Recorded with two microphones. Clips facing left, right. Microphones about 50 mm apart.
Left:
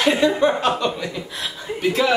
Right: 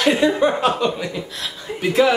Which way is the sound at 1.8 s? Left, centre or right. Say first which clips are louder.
Right 3 dB; centre.